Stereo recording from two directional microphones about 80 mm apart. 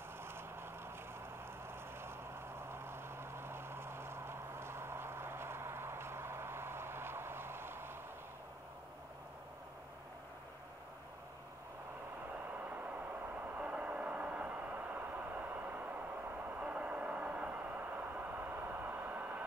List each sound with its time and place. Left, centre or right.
0.2 s vehicle: right
12.4 s vehicle: centre